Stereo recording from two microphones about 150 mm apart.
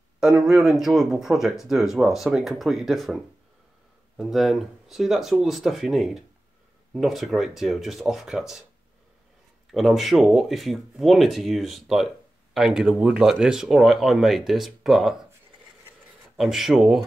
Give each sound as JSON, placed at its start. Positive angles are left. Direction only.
{"t": 0.2, "sound": "speech", "side_deg": -5}
{"t": 4.2, "sound": "speech", "side_deg": 0}
{"t": 9.7, "sound": "speech", "side_deg": 0}
{"t": 16.3, "sound": "speech", "side_deg": 0}